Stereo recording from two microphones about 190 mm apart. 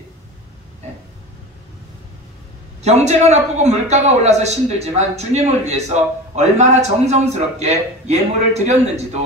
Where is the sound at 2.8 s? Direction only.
35° right (ahead or behind).